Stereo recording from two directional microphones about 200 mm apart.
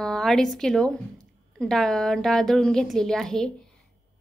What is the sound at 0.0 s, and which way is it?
A woman's voice, centre (ahead or behind).